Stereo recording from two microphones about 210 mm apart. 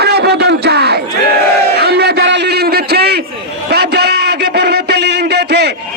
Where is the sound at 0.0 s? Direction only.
50° right (ahead or behind).